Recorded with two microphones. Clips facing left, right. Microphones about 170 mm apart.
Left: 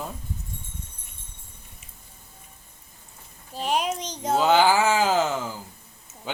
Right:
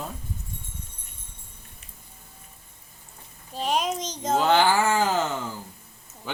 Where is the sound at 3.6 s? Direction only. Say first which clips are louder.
Even; 10° left (ahead or behind).